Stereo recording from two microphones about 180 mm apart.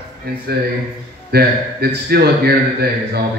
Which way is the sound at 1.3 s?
65° right (ahead or behind).